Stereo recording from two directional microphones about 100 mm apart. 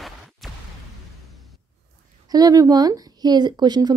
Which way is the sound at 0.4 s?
Centre (ahead or behind).